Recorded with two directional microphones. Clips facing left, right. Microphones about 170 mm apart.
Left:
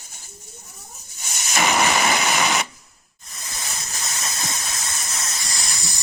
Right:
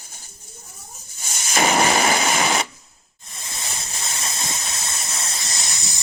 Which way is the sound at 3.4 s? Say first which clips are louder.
Even; 25° right (ahead or behind).